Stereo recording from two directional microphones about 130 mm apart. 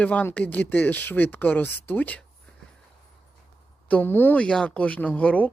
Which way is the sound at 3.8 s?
15° left (ahead or behind).